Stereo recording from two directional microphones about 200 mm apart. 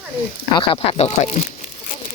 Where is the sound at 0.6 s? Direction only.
30° left (ahead or behind).